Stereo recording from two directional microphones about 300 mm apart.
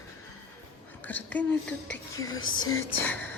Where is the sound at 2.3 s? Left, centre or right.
Left.